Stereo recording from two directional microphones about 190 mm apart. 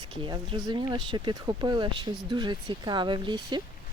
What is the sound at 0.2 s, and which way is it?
Speech, 25° right (ahead or behind).